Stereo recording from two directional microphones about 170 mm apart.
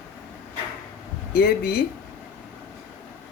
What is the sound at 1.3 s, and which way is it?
Speech, 65° left (ahead or behind).